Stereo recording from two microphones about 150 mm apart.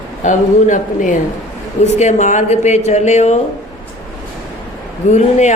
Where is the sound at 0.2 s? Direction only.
55° left (ahead or behind).